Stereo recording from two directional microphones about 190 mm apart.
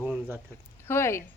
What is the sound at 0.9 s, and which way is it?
Speech, 15° left (ahead or behind).